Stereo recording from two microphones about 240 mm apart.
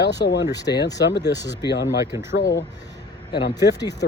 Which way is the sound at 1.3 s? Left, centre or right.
Centre.